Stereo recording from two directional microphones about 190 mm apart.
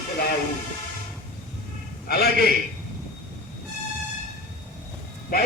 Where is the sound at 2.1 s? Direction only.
55° left (ahead or behind).